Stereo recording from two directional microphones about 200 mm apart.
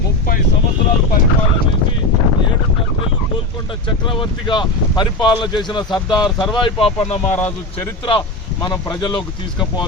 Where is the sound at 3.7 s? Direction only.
25° left (ahead or behind).